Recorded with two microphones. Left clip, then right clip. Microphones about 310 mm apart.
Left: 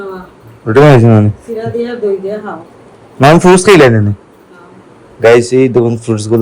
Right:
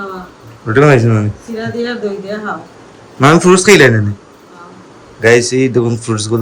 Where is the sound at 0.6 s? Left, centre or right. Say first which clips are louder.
Left 4 dB; centre.